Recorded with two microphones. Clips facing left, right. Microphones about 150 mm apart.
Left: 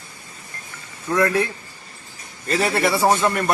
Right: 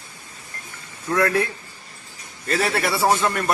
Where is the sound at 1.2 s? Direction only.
10° left (ahead or behind).